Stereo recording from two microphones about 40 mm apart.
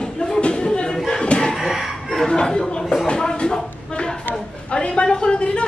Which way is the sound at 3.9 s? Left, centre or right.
Left.